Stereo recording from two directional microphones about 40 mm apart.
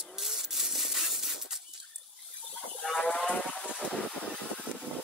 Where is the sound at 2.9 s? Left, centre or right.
Centre.